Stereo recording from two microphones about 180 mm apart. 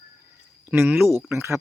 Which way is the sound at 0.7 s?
10° right (ahead or behind).